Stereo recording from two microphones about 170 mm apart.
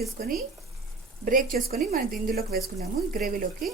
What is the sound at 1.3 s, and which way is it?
A woman's voice, 55° right (ahead or behind).